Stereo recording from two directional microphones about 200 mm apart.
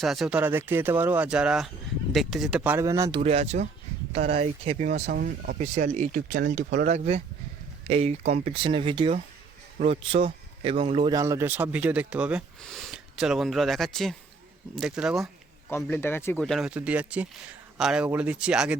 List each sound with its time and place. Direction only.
0.0 s speech: centre (ahead or behind); by 3.2 s 15° right (ahead or behind)
3.2 s speech: 30° right (ahead or behind); by 15.3 s centre (ahead or behind)
15.7 s speech: 10° left (ahead or behind); by 18.8 s 5° right (ahead or behind)